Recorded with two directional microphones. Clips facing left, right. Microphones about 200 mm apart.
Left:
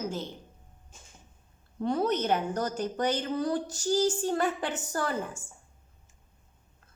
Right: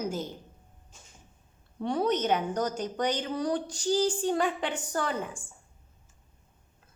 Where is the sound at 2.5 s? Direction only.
15° right (ahead or behind).